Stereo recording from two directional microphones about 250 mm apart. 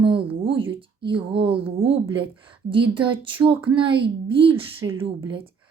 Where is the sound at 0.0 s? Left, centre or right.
Right.